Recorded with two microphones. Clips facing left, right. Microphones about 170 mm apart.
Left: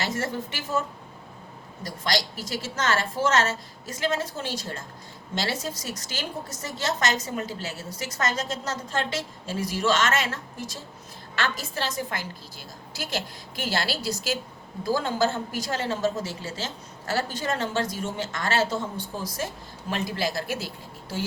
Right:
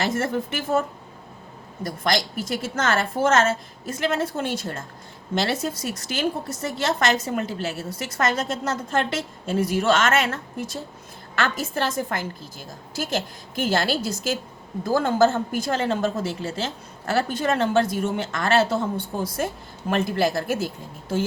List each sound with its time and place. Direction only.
0.1 s a woman's voice: 55° right (ahead or behind)
2.3 s a woman's voice: 55° right (ahead or behind)